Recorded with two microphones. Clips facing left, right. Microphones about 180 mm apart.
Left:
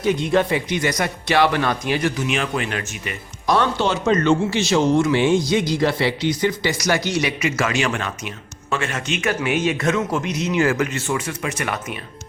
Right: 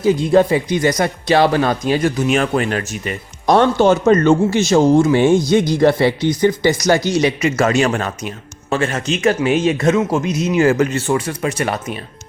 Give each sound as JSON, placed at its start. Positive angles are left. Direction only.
{"t": 0.0, "sound": "a man's voice", "side_deg": -30}